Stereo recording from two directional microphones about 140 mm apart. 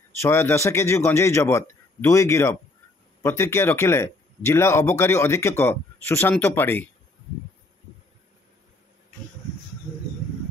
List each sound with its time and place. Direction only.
0.2 s speech: 15° left (ahead or behind)